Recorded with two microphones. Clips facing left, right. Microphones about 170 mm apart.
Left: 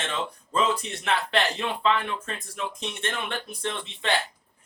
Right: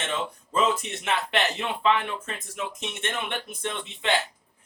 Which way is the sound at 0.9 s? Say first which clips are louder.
Left 1 dB; 20° right (ahead or behind).